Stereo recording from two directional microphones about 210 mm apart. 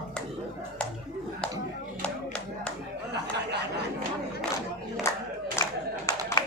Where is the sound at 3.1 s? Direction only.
50° right (ahead or behind).